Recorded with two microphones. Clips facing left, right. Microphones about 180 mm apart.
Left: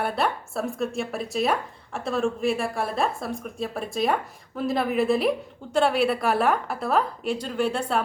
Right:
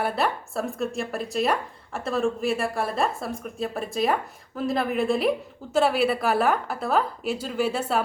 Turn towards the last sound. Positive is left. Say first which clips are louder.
# even
turn(degrees=-5)  # may be behind; listen again after turning